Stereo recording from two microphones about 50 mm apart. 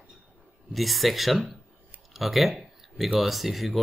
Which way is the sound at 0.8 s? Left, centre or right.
Centre.